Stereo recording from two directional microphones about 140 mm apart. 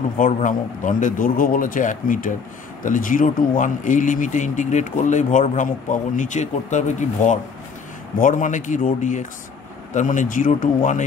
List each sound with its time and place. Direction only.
0.2 s speech: 70° left (ahead or behind)
8.2 s speech: 70° left (ahead or behind)